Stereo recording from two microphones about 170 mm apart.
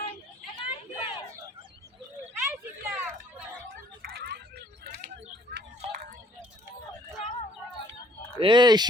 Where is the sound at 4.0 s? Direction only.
70° right (ahead or behind).